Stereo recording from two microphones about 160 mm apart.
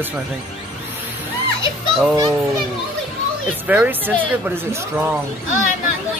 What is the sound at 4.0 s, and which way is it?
Speech, 10° left (ahead or behind).